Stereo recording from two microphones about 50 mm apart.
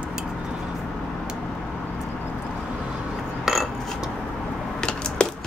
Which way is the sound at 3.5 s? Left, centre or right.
Centre.